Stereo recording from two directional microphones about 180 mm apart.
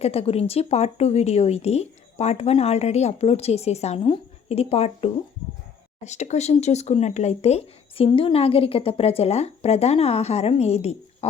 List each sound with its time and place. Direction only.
0.0 s speech: 35° left (ahead or behind)